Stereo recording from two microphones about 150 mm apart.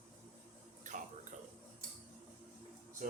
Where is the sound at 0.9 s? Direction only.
55° right (ahead or behind).